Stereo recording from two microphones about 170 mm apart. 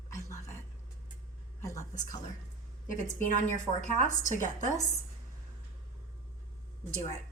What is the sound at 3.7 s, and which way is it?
Speech, 45° left (ahead or behind).